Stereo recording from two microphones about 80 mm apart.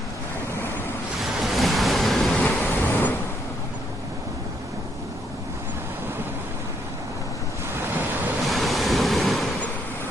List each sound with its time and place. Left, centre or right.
1.2 s waves: centre
2.3 s vehicle: centre
2.6 s waves: left
7.8 s waves: right
8.4 s waves: centre